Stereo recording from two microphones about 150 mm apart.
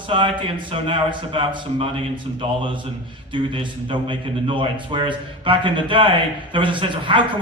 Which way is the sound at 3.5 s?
35° right (ahead or behind).